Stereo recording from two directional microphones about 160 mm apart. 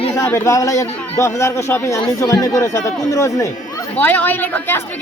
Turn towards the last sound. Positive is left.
turn(degrees=10)  # may be behind; listen again after turning